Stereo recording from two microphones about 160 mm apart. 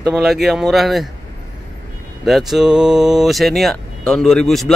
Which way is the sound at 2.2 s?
Centre (ahead or behind).